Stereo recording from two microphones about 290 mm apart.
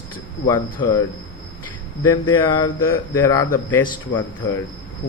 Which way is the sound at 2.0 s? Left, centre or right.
Left.